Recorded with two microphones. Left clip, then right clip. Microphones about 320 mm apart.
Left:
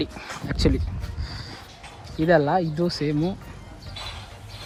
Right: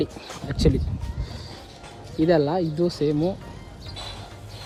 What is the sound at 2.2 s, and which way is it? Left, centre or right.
Speech, centre.